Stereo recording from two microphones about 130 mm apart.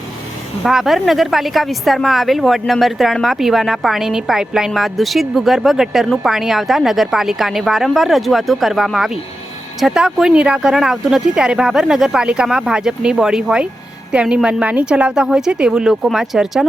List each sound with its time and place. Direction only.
0.6 s a woman's voice: centre (ahead or behind)